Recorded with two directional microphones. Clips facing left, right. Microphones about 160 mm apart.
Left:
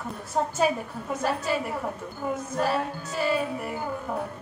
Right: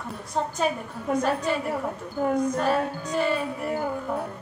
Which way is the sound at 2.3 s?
5° left (ahead or behind).